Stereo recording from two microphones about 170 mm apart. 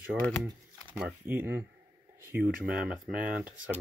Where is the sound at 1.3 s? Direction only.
15° right (ahead or behind).